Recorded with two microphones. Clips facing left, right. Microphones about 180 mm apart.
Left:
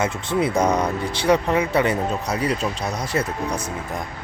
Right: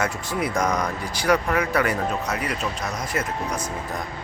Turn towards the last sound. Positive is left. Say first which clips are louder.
# left 3 dB
turn(degrees=30)  # may be behind; listen again after turning